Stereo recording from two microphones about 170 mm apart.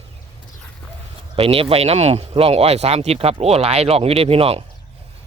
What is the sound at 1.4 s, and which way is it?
Speech, 35° right (ahead or behind).